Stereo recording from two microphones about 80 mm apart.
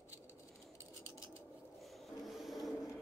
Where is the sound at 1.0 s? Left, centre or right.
Left.